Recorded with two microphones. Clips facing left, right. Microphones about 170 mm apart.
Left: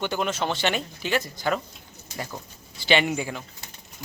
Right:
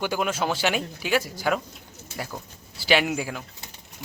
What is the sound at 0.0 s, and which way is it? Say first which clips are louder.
Speech: right 1 dB; 10° right (ahead or behind).